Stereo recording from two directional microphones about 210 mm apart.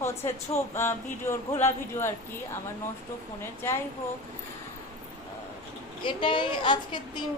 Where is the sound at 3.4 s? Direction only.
10° left (ahead or behind).